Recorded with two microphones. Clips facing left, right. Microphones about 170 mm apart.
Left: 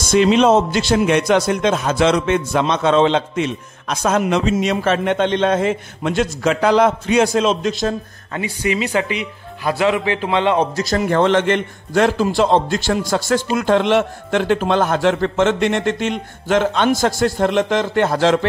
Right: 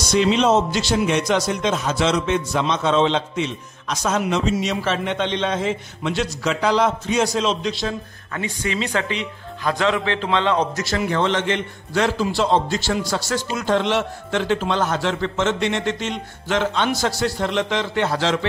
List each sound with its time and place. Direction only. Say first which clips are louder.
0.1 s a man's voice: left 4 dB; 55° left (ahead or behind)
8.4 s speech: left 4 dB; 10° left (ahead or behind)
10.8 s a man's voice: left 5 dB; 40° left (ahead or behind)